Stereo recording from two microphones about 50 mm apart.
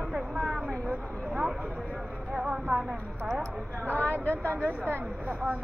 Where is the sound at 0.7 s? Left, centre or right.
Centre.